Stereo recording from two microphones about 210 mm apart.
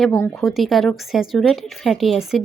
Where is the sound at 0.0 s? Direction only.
5° left (ahead or behind).